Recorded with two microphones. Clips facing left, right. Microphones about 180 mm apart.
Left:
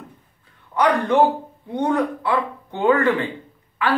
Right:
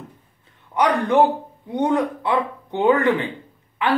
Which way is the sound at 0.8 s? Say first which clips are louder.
Even; 20° right (ahead or behind).